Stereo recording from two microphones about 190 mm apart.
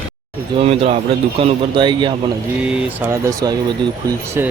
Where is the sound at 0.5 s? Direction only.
30° right (ahead or behind).